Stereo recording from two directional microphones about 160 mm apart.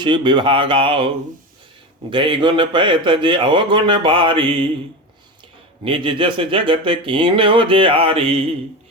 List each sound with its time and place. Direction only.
0.0 s speech: 30° right (ahead or behind)
5.8 s speech: 30° right (ahead or behind)